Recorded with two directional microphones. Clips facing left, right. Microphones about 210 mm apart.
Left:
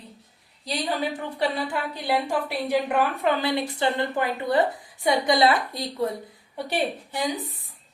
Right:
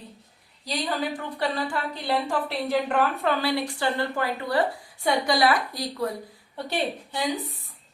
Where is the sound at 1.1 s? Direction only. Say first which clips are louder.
Left 2 dB; 20° left (ahead or behind).